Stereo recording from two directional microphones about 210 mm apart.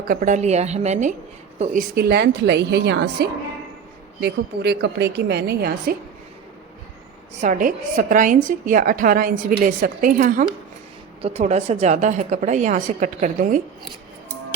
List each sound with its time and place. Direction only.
0.1 s a woman's voice: 35° right (ahead or behind)
7.4 s a woman's voice: 40° right (ahead or behind)